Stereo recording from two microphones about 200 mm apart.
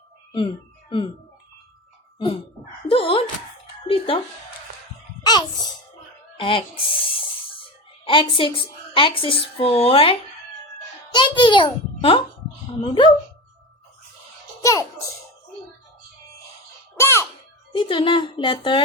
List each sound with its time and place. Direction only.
0.9 s speech: 25° left (ahead or behind)
2.8 s a woman's voice: 25° left (ahead or behind)
5.2 s a sound: 20° left (ahead or behind)
6.3 s music: 25° left (ahead or behind)
8.0 s a woman's voice: 25° left (ahead or behind)
11.1 s a sound: 25° left (ahead or behind)
12.8 s a woman's voice: 25° left (ahead or behind)
14.6 s a child's voice: 15° left (ahead or behind)
17.0 s music: 15° left (ahead or behind)
17.7 s a woman's voice: 25° left (ahead or behind)